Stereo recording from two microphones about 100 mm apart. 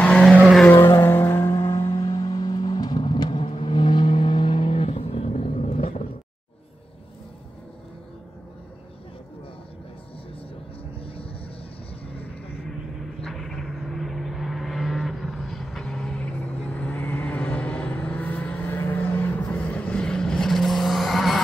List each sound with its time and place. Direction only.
0.0 s vehicle: 10° left (ahead or behind)
0.7 s vehicle: 25° left (ahead or behind)
1.9 s vehicle: 40° left (ahead or behind); by 5.9 s 90° left
11.0 s vehicle: 70° left (ahead or behind)
13.2 s vehicle: 5° left (ahead or behind)